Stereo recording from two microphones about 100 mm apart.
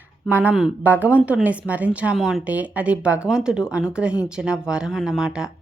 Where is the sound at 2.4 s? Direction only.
15° right (ahead or behind).